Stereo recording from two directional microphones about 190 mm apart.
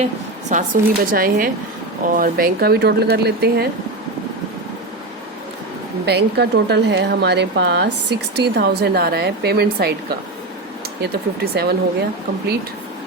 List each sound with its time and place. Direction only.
0.5 s a woman's voice: 45° right (ahead or behind)
6.1 s a woman's voice: 60° right (ahead or behind)
11.0 s a woman's voice: 55° right (ahead or behind)